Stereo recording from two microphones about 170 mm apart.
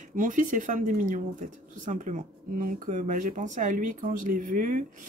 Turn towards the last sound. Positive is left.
turn(degrees=-55)  # may be behind; listen again after turning